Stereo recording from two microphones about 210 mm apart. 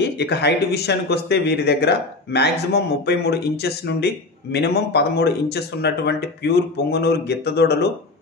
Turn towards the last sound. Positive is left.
turn(degrees=50)  # may be behind; listen again after turning